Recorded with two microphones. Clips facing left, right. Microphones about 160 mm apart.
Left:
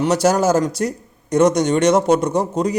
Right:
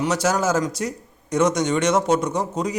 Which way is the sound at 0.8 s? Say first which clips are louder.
Left 5 dB; 65° left (ahead or behind).